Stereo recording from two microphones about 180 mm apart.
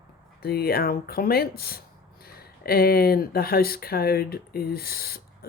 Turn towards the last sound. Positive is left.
turn(degrees=60)  # may be behind; listen again after turning